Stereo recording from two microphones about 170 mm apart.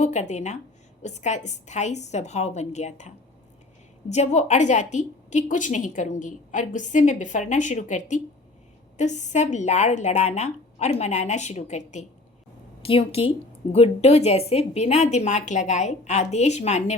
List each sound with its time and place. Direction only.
0.0 s a woman's voice: 45° left (ahead or behind)
4.1 s a woman's voice: 40° left (ahead or behind)